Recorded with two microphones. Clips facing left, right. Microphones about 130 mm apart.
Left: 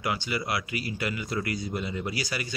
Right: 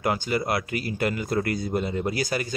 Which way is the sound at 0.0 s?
45° right (ahead or behind).